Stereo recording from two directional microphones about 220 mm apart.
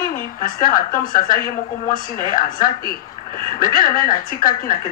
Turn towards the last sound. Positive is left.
turn(degrees=40)  # may be behind; listen again after turning